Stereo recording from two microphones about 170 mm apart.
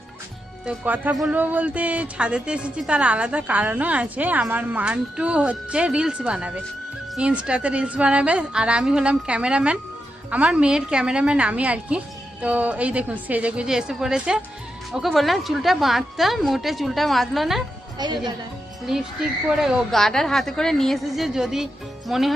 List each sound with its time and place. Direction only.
0.6 s a woman's voice: 10° right (ahead or behind)
18.0 s speech: 25° right (ahead or behind)
18.9 s a woman's voice: centre (ahead or behind)